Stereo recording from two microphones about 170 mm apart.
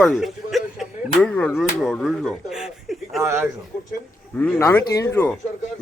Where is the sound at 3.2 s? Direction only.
15° right (ahead or behind).